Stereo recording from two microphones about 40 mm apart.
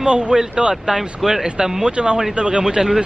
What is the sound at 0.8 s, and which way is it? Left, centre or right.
A man's voice, centre.